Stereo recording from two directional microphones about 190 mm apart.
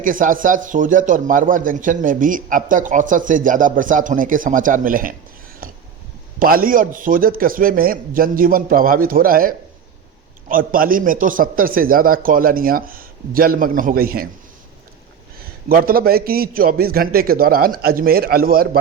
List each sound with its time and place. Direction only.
0.0 s a man's voice: 45° right (ahead or behind)
5.6 s a sound: 50° right (ahead or behind)
6.4 s a man's voice: 50° right (ahead or behind)
15.7 s a man's voice: 50° right (ahead or behind)